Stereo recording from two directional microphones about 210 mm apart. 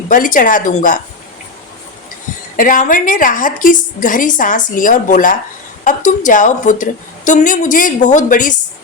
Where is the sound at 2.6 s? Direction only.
40° left (ahead or behind).